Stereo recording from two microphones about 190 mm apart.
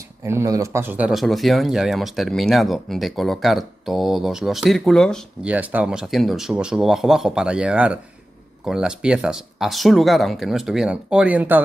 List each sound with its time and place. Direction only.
0.2 s speech: 15° right (ahead or behind)